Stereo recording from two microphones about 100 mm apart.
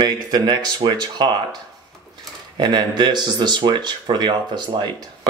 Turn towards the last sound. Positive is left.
turn(degrees=-50)  # may be behind; listen again after turning